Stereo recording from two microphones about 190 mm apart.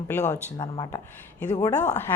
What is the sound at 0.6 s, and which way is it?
Speech, 20° left (ahead or behind).